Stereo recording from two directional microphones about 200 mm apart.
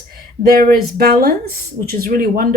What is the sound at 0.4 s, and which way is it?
Speech, 45° right (ahead or behind).